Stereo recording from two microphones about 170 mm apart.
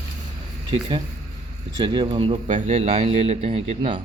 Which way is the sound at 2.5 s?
50° right (ahead or behind).